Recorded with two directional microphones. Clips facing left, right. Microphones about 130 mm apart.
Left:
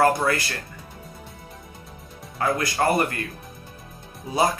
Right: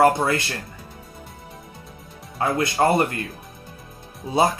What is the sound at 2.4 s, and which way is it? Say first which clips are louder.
Speech: right 3 dB; 25° right (ahead or behind).